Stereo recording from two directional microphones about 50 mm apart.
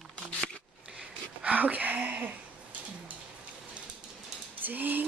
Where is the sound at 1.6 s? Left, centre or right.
Right.